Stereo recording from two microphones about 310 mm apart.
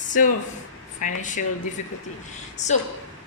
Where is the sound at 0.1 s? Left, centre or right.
Left.